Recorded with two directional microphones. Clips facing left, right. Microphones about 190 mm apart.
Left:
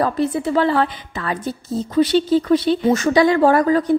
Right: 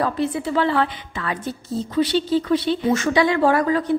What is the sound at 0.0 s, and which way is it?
A woman's voice, 40° left (ahead or behind).